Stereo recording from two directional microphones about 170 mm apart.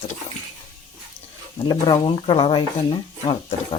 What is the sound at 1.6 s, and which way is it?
Speech, 25° left (ahead or behind).